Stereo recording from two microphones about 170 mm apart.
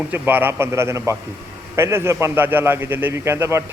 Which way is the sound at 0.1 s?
10° right (ahead or behind).